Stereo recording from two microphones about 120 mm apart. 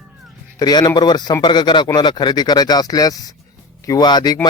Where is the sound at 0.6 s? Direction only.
35° left (ahead or behind).